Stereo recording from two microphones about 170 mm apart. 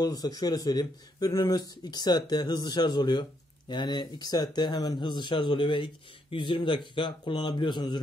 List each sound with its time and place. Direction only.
0.0 s speech: 20° left (ahead or behind)